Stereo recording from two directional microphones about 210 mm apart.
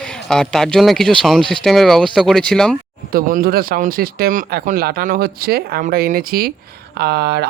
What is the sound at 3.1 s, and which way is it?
Speech, 45° right (ahead or behind).